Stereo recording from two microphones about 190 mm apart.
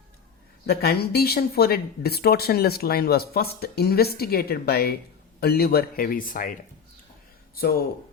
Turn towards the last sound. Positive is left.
turn(degrees=50)  # may be behind; listen again after turning